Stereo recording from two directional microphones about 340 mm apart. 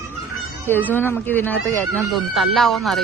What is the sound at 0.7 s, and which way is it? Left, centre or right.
Speech, centre.